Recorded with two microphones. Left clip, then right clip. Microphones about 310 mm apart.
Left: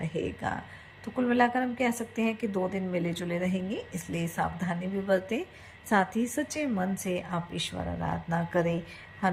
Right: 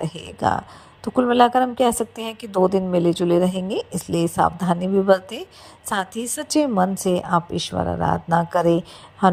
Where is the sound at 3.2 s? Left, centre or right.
Right.